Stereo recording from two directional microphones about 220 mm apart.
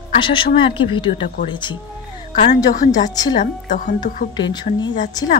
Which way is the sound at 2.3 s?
40° left (ahead or behind).